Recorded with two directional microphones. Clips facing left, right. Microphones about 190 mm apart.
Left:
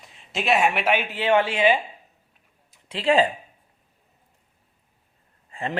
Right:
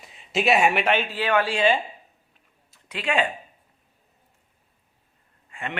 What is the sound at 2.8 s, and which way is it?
Speech, 30° left (ahead or behind).